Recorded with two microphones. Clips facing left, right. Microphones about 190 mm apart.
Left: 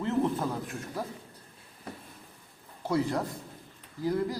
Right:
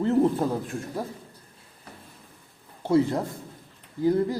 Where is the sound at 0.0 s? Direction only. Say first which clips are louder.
Right 6 dB; 30° right (ahead or behind).